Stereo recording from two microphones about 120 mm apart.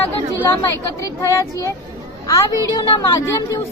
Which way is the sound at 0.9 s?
25° left (ahead or behind).